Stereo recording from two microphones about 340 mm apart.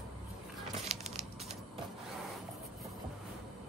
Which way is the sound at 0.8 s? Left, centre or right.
Centre.